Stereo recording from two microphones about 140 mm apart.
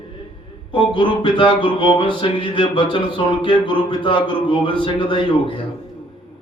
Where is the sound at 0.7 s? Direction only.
35° left (ahead or behind).